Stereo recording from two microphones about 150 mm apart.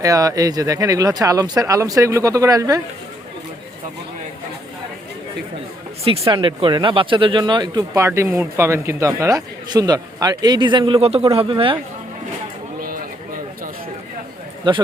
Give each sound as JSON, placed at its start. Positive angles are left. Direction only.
{"t": 0.0, "sound": "speech", "side_deg": -25}
{"t": 6.2, "sound": "speech", "side_deg": -30}
{"t": 14.7, "sound": "speech", "side_deg": -30}